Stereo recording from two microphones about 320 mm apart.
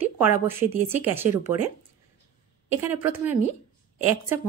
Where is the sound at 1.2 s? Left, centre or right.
Right.